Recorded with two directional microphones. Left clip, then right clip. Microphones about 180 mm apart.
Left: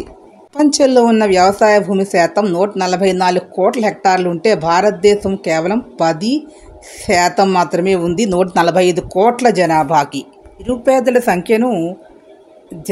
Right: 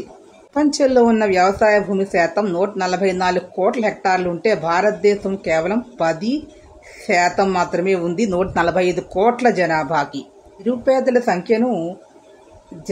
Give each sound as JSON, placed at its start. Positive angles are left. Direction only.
{"t": 0.6, "sound": "speech", "side_deg": 45}